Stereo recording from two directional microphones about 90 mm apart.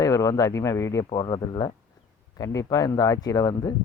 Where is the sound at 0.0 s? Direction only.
40° left (ahead or behind).